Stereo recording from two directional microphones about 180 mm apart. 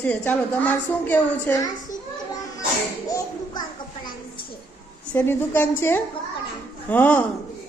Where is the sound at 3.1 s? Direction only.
25° left (ahead or behind).